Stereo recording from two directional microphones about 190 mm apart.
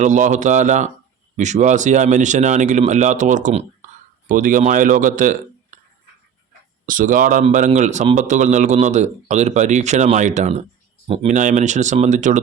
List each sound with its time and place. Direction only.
0.0 s a man's voice: 40° right (ahead or behind)
6.8 s a man's voice: 45° right (ahead or behind)